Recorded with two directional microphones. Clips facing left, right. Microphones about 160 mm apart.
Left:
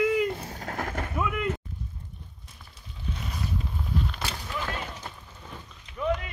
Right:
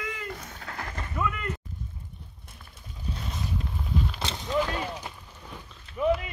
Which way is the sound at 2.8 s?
40° right (ahead or behind).